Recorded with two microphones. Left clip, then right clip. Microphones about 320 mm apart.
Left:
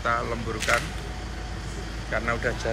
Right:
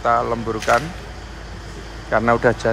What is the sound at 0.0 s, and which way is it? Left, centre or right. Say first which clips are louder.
Speech: right 8 dB; centre.